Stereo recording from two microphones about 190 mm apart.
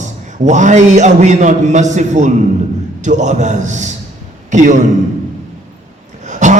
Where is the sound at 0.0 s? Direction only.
40° right (ahead or behind).